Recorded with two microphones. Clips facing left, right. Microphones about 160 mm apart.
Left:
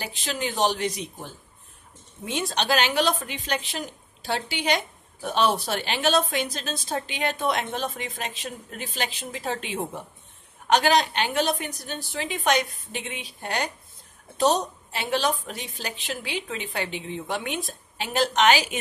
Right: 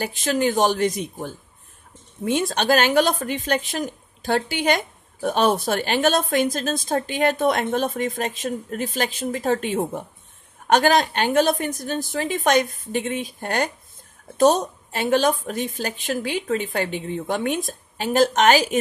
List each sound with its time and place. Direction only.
0.0 s a woman's voice: 50° right (ahead or behind)